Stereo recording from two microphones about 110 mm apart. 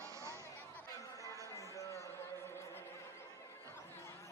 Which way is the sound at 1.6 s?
30° left (ahead or behind).